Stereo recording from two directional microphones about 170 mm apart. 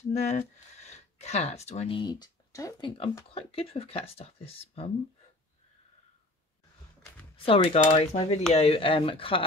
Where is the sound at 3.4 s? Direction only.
35° left (ahead or behind).